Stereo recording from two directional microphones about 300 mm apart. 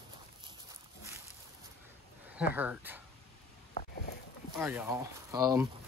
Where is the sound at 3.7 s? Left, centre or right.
Left.